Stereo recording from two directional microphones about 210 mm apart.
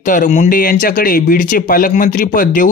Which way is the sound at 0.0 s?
40° left (ahead or behind).